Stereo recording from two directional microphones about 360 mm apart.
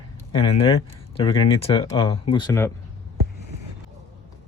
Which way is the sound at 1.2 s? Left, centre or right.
Centre.